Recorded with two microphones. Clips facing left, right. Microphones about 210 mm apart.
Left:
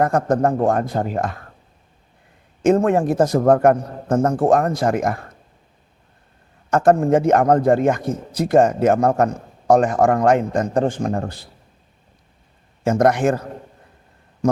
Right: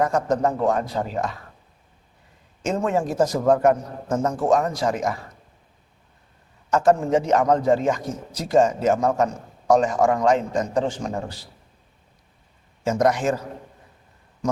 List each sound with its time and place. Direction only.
0.0 s speech: 55° left (ahead or behind)
2.6 s a man's voice: 55° left (ahead or behind)
6.7 s a man's voice: 55° left (ahead or behind)
12.8 s a man's voice: 55° left (ahead or behind)